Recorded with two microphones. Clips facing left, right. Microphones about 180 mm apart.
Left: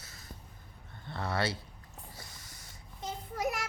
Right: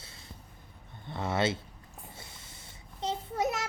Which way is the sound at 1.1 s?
20° right (ahead or behind).